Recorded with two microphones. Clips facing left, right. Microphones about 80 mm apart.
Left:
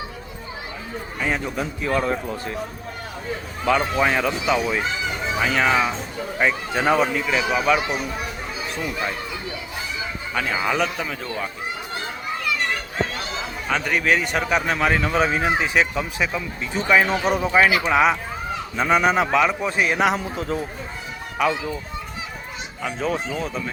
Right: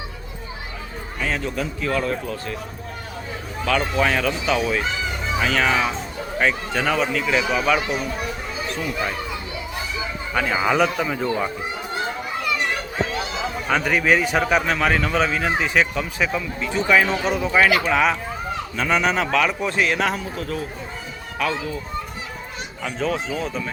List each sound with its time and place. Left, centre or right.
1.2 s a man's voice: centre
3.7 s speech: centre
6.8 s a man's voice: centre
7.3 s speech: centre
10.5 s speech: centre
13.7 s a man's voice: centre
20.1 s a man's voice: left
22.8 s a man's voice: centre